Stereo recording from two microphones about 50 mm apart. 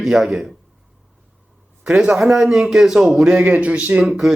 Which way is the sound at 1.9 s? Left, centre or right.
Centre.